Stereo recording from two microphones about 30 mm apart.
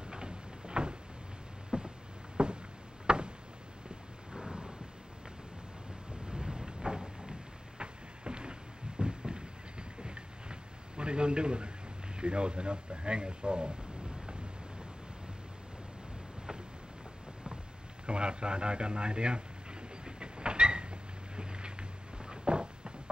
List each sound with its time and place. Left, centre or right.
0.1 s a sound: right
4.3 s thunder: right
6.2 s a sound: right
7.8 s vehicle: right
12.2 s speech: right
18.0 s speech: right
20.1 s train: right